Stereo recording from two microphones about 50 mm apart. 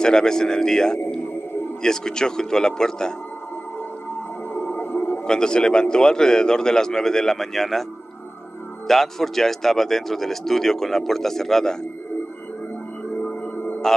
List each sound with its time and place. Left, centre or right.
0.0 s speech: centre
4.6 s music: left
5.2 s speech: centre
8.8 s speech: centre
13.2 s music: left